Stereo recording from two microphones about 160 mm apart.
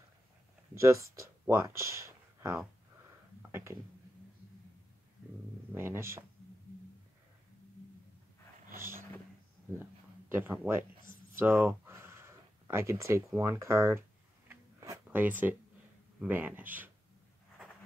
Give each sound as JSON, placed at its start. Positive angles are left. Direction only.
{"t": 0.7, "sound": "speech", "side_deg": -20}
{"t": 5.8, "sound": "speech", "side_deg": -15}
{"t": 8.7, "sound": "vehicle", "side_deg": -15}
{"t": 10.3, "sound": "speech", "side_deg": -10}
{"t": 14.5, "sound": "a sound", "side_deg": -15}
{"t": 16.2, "sound": "speech", "side_deg": -10}